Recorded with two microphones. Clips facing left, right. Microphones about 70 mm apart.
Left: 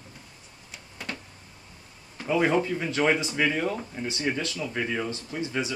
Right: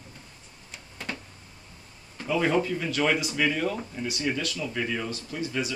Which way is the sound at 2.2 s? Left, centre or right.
Centre.